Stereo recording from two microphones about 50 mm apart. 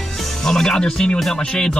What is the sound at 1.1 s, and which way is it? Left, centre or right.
Speech, centre.